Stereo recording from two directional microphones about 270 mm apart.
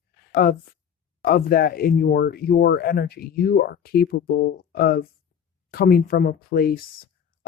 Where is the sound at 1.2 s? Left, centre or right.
Left.